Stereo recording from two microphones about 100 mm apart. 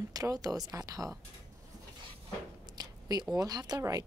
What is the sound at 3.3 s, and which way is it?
Speech, 40° right (ahead or behind).